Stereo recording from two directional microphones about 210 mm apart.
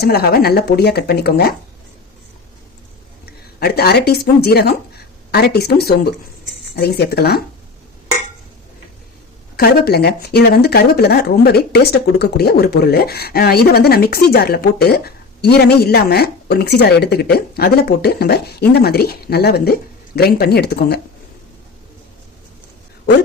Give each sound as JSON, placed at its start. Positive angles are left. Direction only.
{"t": 0.0, "sound": "speech", "side_deg": 50}
{"t": 3.2, "sound": "speech", "side_deg": 50}
{"t": 9.6, "sound": "speech", "side_deg": 50}